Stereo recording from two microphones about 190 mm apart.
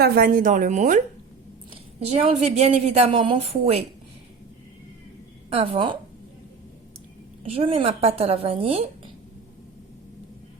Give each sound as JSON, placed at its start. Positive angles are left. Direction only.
{"t": 0.0, "sound": "a woman's voice", "side_deg": -50}
{"t": 5.5, "sound": "a woman's voice", "side_deg": -30}
{"t": 7.4, "sound": "a woman's voice", "side_deg": -30}